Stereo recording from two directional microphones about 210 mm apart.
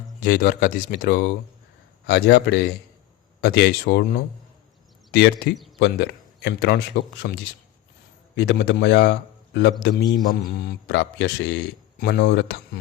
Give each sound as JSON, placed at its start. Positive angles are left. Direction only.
{"t": 0.2, "sound": "speech", "side_deg": 40}
{"t": 2.0, "sound": "speech", "side_deg": 60}
{"t": 8.4, "sound": "speech", "side_deg": 60}
{"t": 11.9, "sound": "speech", "side_deg": 45}